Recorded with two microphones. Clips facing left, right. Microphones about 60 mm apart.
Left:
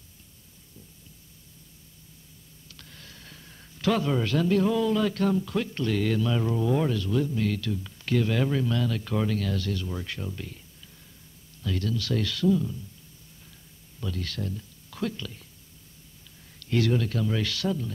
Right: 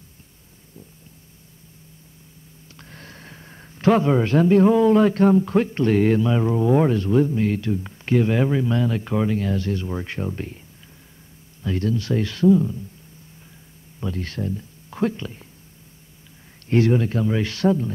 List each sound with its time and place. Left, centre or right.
2.8 s speech: right
11.6 s speech: right
13.9 s speech: right
16.6 s speech: right